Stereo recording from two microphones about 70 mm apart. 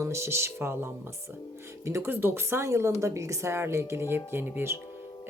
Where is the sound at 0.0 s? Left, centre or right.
Right.